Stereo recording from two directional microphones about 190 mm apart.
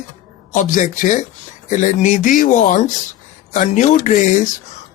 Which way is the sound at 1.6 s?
40° left (ahead or behind).